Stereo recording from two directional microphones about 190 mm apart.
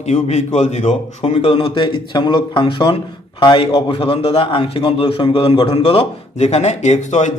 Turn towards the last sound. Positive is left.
turn(degrees=40)  # may be behind; listen again after turning